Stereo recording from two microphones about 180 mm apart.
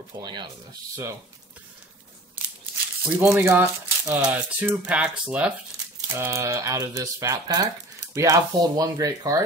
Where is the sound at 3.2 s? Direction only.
10° right (ahead or behind).